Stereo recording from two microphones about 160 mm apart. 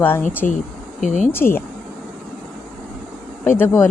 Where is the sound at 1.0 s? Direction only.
50° left (ahead or behind).